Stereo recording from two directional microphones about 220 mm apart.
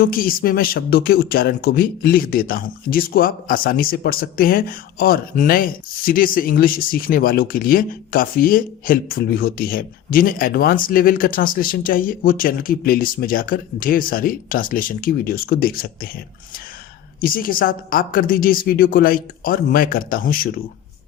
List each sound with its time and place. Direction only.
0.0 s speech: 40° left (ahead or behind)
17.2 s speech: 40° left (ahead or behind)